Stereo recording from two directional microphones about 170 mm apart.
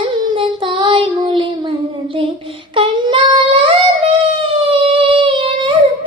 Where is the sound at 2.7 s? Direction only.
30° right (ahead or behind).